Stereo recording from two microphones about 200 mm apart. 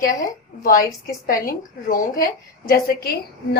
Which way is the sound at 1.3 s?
45° left (ahead or behind).